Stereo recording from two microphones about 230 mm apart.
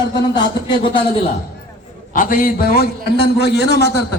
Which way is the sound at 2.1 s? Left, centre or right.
Left.